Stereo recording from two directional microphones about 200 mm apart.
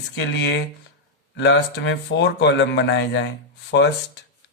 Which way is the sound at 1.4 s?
60° left (ahead or behind).